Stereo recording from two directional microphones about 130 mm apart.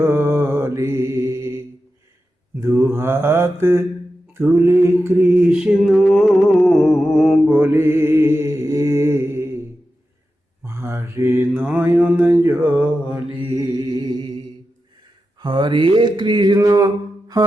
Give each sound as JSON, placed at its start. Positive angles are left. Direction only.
{"t": 0.0, "sound": "mantra", "side_deg": -20}
{"t": 5.4, "sound": "a sound", "side_deg": -5}
{"t": 7.4, "sound": "mantra", "side_deg": -15}
{"t": 10.6, "sound": "mantra", "side_deg": -20}
{"t": 13.6, "sound": "mantra", "side_deg": -30}
{"t": 15.4, "sound": "mantra", "side_deg": -35}